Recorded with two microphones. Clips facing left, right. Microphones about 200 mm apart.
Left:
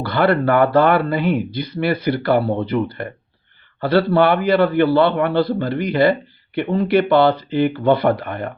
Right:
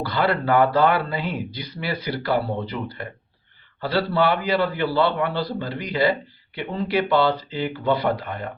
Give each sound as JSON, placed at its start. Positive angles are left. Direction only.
{"t": 0.0, "sound": "a man's voice", "side_deg": 55}